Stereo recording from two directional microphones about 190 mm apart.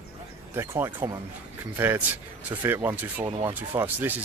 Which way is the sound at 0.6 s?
10° right (ahead or behind).